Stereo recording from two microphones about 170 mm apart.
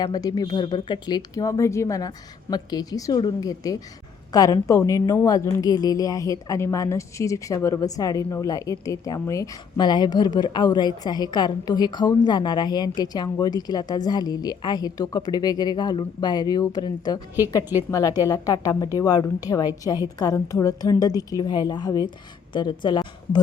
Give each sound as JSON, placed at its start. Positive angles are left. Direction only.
{"t": 0.0, "sound": "a woman's voice", "side_deg": 20}
{"t": 18.2, "sound": "a woman's voice", "side_deg": 20}